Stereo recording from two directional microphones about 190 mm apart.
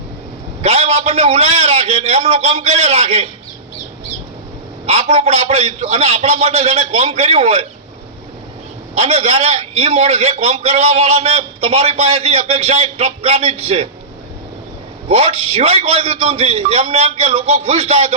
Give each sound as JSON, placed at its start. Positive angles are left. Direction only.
{"t": 0.6, "sound": "a man's voice", "side_deg": -35}
{"t": 4.9, "sound": "a man's voice", "side_deg": -35}
{"t": 9.0, "sound": "a man's voice", "side_deg": -35}
{"t": 15.1, "sound": "a man's voice", "side_deg": -35}